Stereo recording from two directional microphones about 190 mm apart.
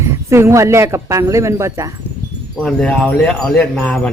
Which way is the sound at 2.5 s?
Centre (ahead or behind).